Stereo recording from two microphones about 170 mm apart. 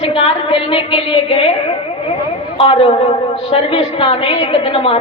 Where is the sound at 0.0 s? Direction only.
35° left (ahead or behind).